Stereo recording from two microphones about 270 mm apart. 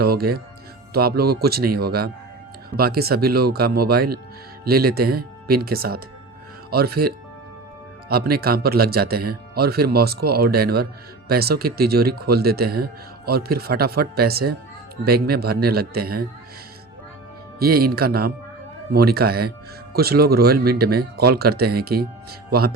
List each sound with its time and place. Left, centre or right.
0.0 s speech: right
8.4 s speech: right
17.6 s speech: right